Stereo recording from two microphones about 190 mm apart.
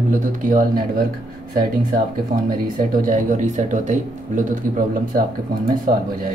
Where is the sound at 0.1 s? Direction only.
45° right (ahead or behind).